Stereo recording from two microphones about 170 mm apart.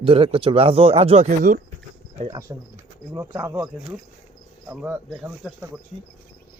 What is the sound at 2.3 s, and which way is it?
Speech, 20° right (ahead or behind).